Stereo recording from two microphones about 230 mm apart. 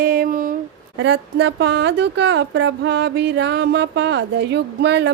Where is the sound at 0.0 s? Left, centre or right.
Right.